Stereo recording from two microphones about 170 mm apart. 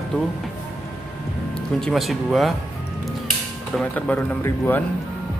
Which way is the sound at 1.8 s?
Centre (ahead or behind).